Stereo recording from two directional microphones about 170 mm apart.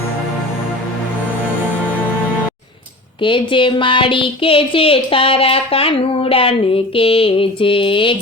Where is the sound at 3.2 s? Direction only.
30° left (ahead or behind).